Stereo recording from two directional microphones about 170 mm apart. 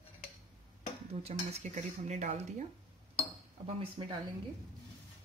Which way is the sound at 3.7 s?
30° right (ahead or behind).